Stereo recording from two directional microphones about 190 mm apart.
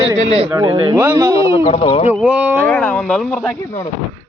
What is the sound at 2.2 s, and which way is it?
Speech, 5° right (ahead or behind).